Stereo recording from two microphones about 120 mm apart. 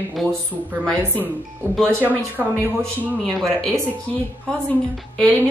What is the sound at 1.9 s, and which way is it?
Speech, 20° right (ahead or behind).